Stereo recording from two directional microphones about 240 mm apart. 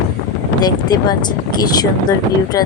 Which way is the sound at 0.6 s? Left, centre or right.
Centre.